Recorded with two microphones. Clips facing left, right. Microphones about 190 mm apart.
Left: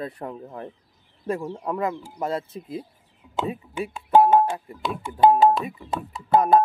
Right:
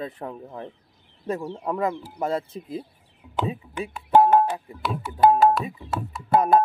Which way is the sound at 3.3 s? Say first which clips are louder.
Even; 10° left (ahead or behind).